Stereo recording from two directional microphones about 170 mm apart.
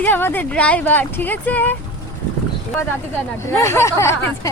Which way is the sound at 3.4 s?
15° left (ahead or behind).